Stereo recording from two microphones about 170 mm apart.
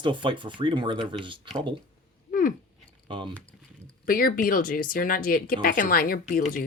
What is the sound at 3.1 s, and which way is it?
Speech, 30° right (ahead or behind).